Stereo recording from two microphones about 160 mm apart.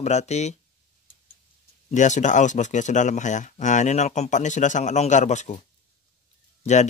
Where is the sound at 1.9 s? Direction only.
50° left (ahead or behind).